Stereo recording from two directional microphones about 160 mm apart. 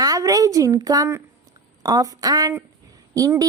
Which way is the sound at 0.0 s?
20° right (ahead or behind).